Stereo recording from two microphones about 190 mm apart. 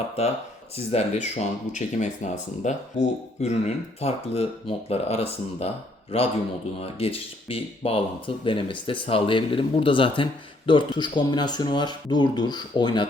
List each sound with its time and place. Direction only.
0.9 s speech: 35° left (ahead or behind)